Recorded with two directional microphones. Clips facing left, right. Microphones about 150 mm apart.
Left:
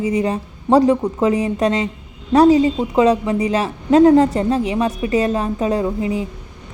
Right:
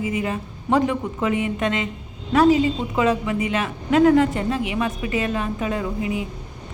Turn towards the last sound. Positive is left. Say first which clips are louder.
# left 5 dB
turn(degrees=30)  # may be behind; listen again after turning